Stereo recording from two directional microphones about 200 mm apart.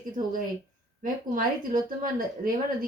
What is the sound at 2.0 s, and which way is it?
Speech, 45° right (ahead or behind).